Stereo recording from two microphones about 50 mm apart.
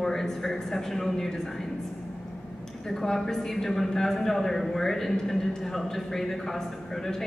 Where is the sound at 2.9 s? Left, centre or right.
Centre.